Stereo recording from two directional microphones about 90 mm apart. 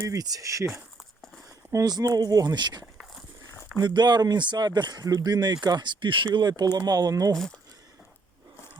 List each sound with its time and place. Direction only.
0.0 s speech: 40° right (ahead or behind)
1.7 s speech: 45° right (ahead or behind)
2.8 s a sound: centre (ahead or behind)
3.8 s speech: 55° right (ahead or behind)
6.3 s speech: 50° right (ahead or behind)